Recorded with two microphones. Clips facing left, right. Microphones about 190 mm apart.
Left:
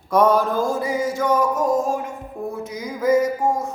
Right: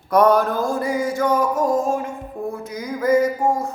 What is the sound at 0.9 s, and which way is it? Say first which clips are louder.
Music: even; 25° left (ahead or behind).